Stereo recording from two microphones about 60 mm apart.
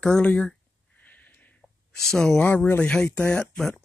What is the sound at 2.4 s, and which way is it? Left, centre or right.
Speech, left.